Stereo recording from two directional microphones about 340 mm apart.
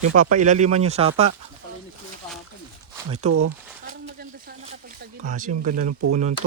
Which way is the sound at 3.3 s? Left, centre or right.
Right.